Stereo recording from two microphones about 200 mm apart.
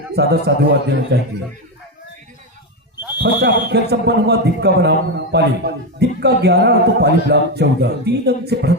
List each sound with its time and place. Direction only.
0.2 s speech: 55° right (ahead or behind)
3.2 s speech: 55° right (ahead or behind)